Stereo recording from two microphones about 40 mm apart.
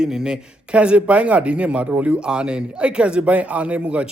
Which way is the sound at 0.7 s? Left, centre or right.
Right.